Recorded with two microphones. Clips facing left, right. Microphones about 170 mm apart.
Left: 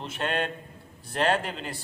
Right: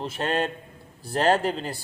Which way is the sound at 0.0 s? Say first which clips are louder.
Right 3 dB; 35° right (ahead or behind).